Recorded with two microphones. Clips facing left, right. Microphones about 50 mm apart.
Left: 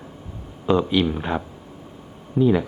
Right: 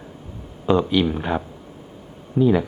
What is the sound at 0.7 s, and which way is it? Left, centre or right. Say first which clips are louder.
Speech: right 1 dB; centre.